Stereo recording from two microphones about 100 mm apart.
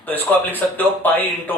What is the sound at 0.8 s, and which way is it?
Speech, 15° left (ahead or behind).